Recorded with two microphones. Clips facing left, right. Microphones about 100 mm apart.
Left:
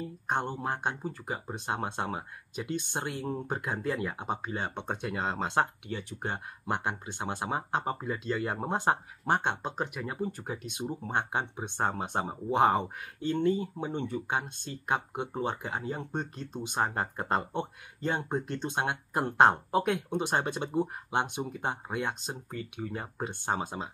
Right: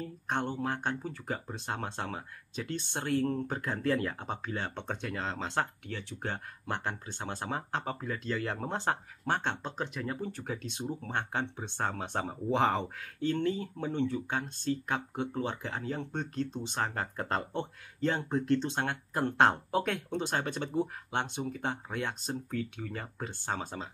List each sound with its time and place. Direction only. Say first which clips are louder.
0.0 s speech: left 2 dB; 5° left (ahead or behind)
10.3 s speech: even; 5° left (ahead or behind)
12.8 s speech: right 1 dB; 15° left (ahead or behind)
13.4 s speech: left 4 dB; 5° left (ahead or behind)